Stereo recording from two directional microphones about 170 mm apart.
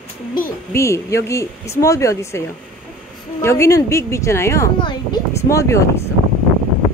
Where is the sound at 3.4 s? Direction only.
15° left (ahead or behind).